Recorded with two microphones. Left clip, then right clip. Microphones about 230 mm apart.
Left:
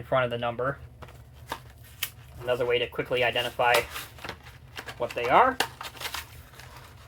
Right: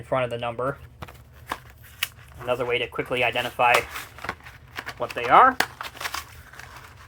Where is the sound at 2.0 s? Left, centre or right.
Right.